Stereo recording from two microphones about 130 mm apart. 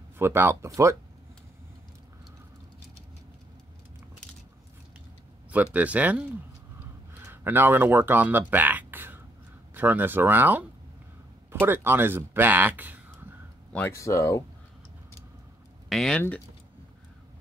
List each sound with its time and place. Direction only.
0.2 s speech: 20° right (ahead or behind)
5.5 s speech: 10° right (ahead or behind)
11.6 s speech: 15° right (ahead or behind)
13.7 s speech: 20° left (ahead or behind)
15.9 s speech: 5° left (ahead or behind)